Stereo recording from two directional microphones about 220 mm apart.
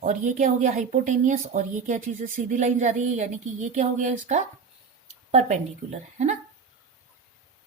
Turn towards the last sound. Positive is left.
turn(degrees=-30)  # may be behind; listen again after turning